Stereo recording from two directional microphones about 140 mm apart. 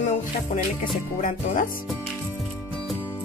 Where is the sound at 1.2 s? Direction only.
70° left (ahead or behind).